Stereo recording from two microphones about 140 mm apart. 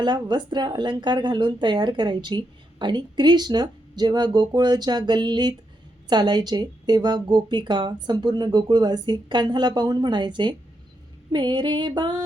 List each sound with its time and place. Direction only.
0.0 s speech: 35° right (ahead or behind)